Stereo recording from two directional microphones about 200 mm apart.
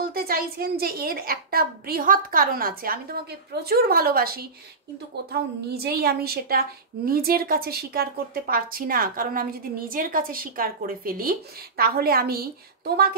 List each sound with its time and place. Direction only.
0.1 s a woman's voice: 45° right (ahead or behind)